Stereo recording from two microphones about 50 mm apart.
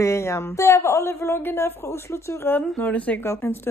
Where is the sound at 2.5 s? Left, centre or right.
Left.